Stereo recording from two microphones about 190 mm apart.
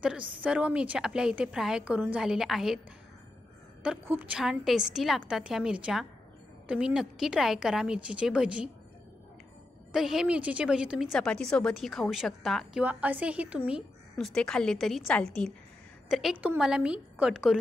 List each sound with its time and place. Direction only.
0.4 s a woman's voice: 5° right (ahead or behind)
3.8 s a woman's voice: 10° right (ahead or behind)
9.9 s a woman's voice: centre (ahead or behind)